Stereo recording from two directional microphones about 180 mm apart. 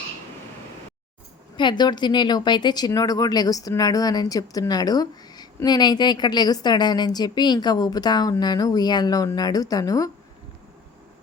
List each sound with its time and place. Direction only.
1.5 s speech: 25° left (ahead or behind)